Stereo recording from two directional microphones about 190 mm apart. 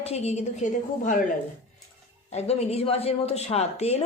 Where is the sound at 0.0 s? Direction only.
35° left (ahead or behind).